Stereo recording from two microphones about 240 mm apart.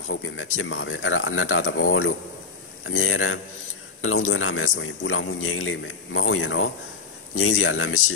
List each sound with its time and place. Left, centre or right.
0.1 s a man's voice: left